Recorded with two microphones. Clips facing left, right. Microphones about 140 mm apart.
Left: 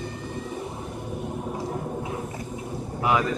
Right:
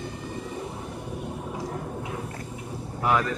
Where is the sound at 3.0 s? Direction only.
5° left (ahead or behind).